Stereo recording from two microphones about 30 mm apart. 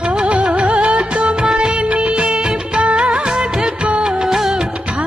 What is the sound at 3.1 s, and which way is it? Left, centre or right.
Music of bollywood, right.